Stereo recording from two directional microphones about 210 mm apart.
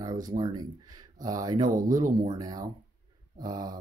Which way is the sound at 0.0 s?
15° right (ahead or behind).